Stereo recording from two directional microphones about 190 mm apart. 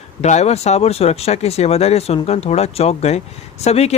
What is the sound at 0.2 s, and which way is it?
Speech, 35° left (ahead or behind).